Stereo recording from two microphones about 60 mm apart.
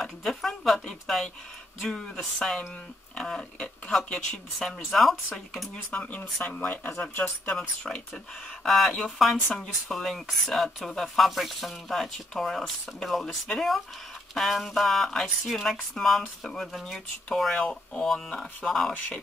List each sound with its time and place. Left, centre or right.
0.0 s speech: centre
5.9 s speech: left
9.2 s speech: centre
17.6 s speech: centre
18.0 s speech: centre